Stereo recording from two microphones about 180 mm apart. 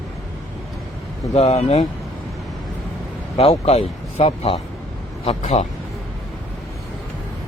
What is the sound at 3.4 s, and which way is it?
Speech, 35° left (ahead or behind).